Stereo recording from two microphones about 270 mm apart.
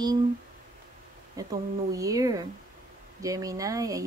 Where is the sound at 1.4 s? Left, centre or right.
Centre.